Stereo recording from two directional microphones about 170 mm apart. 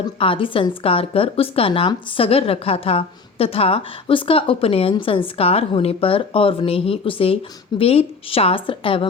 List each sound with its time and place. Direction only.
0.0 s speech: 30° left (ahead or behind)